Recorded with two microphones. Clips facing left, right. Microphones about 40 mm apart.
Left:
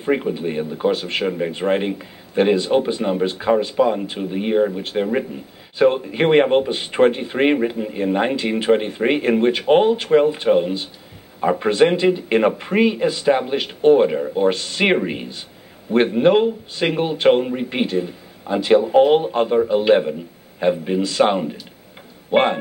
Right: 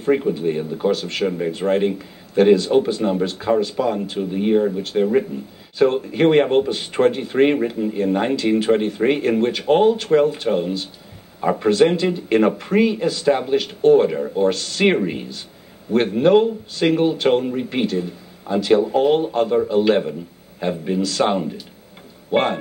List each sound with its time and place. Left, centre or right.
0.0 s speech: centre